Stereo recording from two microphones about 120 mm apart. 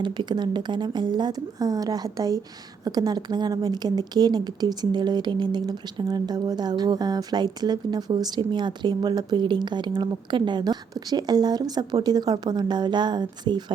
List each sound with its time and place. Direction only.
0.0 s a woman's voice: 40° right (ahead or behind)